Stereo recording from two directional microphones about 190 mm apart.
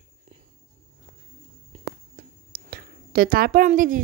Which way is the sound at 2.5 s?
55° right (ahead or behind).